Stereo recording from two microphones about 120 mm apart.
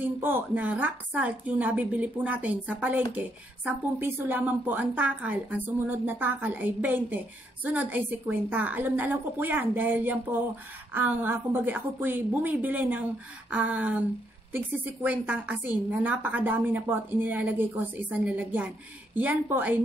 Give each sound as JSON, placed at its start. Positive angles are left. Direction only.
{"t": 0.0, "sound": "a woman's voice", "side_deg": -15}
{"t": 15.0, "sound": "a woman's voice", "side_deg": -10}